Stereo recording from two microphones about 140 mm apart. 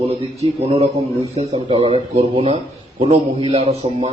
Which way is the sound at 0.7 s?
45° right (ahead or behind).